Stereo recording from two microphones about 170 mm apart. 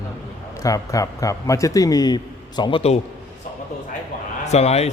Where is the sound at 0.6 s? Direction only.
20° left (ahead or behind).